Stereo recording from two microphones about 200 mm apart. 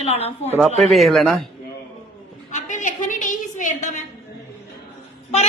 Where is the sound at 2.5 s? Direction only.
40° left (ahead or behind).